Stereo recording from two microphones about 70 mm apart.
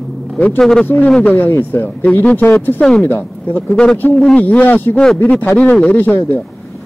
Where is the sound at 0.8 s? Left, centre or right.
Left.